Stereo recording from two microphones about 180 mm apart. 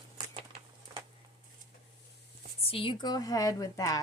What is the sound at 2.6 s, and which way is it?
Speech, 30° left (ahead or behind).